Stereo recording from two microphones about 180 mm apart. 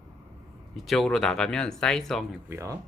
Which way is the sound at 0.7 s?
Centre (ahead or behind).